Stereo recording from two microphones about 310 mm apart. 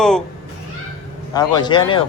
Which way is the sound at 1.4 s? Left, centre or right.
Centre.